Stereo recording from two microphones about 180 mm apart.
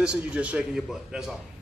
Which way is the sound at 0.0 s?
5° right (ahead or behind).